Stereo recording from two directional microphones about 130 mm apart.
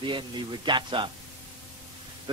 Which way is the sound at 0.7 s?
40° right (ahead or behind).